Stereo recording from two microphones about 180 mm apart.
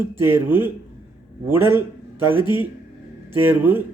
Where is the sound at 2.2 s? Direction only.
10° right (ahead or behind).